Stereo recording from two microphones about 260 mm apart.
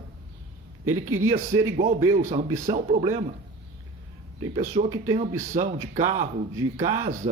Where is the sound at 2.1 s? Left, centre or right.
Right.